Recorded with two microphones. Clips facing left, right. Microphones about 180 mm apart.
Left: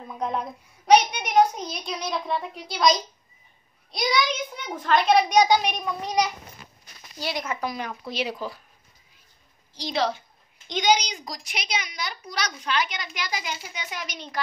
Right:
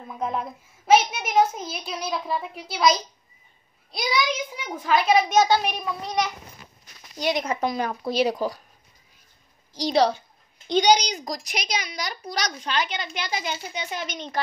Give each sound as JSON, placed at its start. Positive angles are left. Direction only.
{"t": 0.1, "sound": "a woman's voice", "side_deg": 0}
{"t": 7.2, "sound": "speech", "side_deg": -20}
{"t": 7.7, "sound": "a woman's voice", "side_deg": -40}
{"t": 9.8, "sound": "a woman's voice", "side_deg": -35}